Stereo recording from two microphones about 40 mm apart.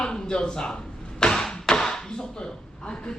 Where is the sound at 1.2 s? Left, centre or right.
Left.